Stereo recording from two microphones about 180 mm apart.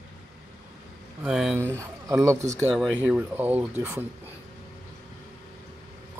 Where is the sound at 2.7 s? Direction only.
Centre (ahead or behind).